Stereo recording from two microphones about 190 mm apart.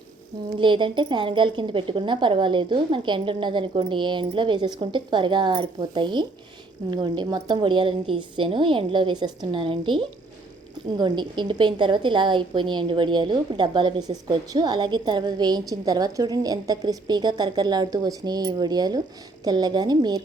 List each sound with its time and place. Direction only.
0.6 s a woman's voice: 25° right (ahead or behind)